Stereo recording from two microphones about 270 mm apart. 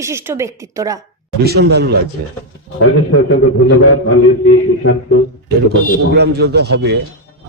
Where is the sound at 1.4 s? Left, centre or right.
Right.